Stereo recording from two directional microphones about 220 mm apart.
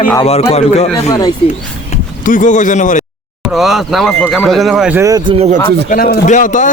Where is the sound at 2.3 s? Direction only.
35° left (ahead or behind).